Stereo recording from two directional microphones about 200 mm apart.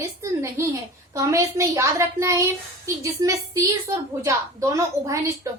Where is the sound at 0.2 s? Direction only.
15° right (ahead or behind).